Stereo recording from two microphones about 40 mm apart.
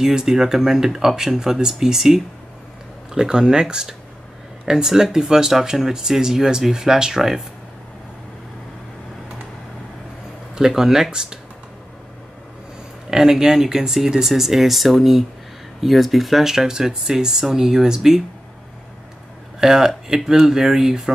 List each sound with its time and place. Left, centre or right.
0.0 s speech: centre
10.7 s speech: centre
13.1 s speech: centre
19.6 s speech: centre